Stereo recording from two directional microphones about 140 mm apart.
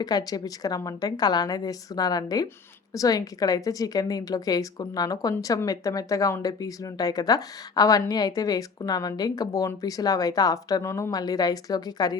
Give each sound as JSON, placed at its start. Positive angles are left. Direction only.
{"t": 0.0, "sound": "speech", "side_deg": 30}